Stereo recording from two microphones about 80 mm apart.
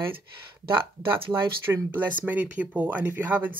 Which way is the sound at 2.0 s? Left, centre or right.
Right.